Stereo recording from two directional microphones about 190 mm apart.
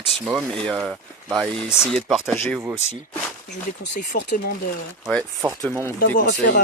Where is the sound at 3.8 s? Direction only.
60° left (ahead or behind).